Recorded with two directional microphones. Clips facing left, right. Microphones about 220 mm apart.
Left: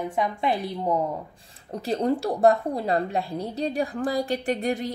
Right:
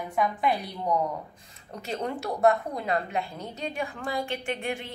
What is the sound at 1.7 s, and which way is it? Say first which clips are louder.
A woman's voice: left 8 dB; 35° left (ahead or behind).